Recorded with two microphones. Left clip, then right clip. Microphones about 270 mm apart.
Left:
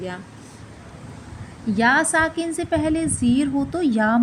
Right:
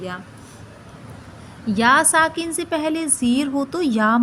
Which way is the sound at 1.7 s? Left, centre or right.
Centre.